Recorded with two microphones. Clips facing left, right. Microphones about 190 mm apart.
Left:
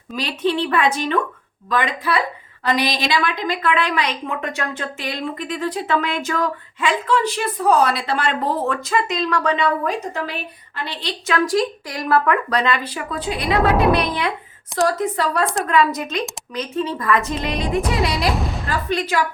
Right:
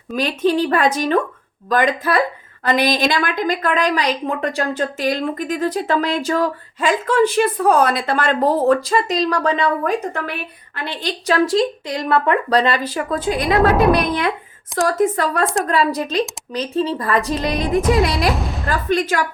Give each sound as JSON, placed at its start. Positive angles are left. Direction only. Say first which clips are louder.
{"t": 0.2, "sound": "a woman's voice", "louder": "right 4 dB", "side_deg": -45}
{"t": 9.8, "sound": "speech", "louder": "right 3 dB", "side_deg": -55}
{"t": 11.3, "sound": "a woman's voice", "louder": "right 3 dB", "side_deg": -30}
{"t": 14.8, "sound": "a woman's voice", "louder": "right 5 dB", "side_deg": -50}
{"t": 15.6, "sound": "a woman's voice", "louder": "even", "side_deg": -35}
{"t": 17.5, "sound": "speech", "louder": "right 5 dB", "side_deg": 0}
{"t": 18.9, "sound": "a woman's voice", "louder": "right 3 dB", "side_deg": -45}